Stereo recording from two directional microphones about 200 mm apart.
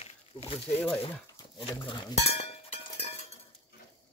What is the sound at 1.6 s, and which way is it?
Chink, 25° left (ahead or behind).